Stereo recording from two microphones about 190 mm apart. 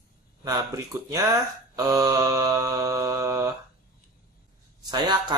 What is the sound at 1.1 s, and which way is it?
Mantra, 20° right (ahead or behind).